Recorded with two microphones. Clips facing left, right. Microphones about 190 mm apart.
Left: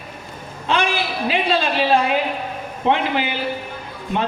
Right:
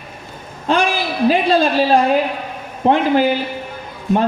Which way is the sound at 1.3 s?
40° right (ahead or behind).